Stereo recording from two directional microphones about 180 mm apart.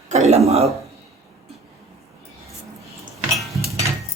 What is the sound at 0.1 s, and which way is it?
Speech, 35° right (ahead or behind).